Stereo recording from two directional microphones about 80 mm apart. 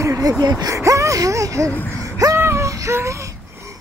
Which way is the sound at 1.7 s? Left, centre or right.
Left.